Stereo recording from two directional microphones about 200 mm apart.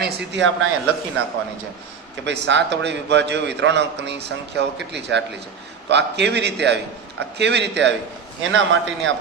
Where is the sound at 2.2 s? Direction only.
60° right (ahead or behind).